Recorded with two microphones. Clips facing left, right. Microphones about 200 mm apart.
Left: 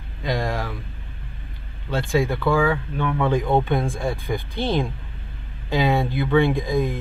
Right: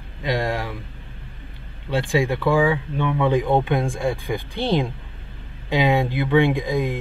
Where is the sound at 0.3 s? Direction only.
Centre (ahead or behind).